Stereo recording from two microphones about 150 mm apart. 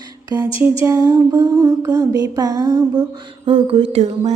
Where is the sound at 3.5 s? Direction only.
35° right (ahead or behind).